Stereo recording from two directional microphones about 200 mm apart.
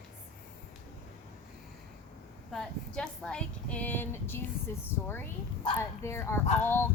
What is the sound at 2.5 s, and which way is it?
A woman's voice, 5° left (ahead or behind).